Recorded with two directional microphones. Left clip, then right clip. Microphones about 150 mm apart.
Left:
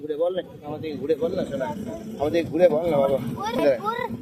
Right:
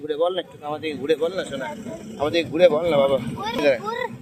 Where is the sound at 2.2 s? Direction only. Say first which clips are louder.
Right 2 dB; 25° left (ahead or behind).